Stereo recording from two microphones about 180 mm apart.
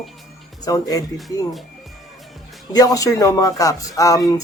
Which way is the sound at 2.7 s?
20° left (ahead or behind).